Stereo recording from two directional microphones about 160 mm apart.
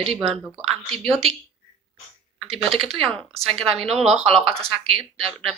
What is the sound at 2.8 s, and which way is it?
Speech, centre (ahead or behind).